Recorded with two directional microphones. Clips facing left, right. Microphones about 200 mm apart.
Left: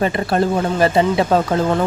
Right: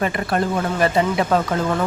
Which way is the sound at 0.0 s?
30° left (ahead or behind).